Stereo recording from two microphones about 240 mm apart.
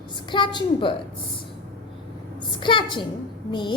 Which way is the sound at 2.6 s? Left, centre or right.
Centre.